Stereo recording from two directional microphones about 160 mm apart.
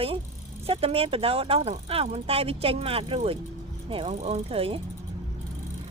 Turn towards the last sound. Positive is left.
turn(degrees=-35)  # may be behind; listen again after turning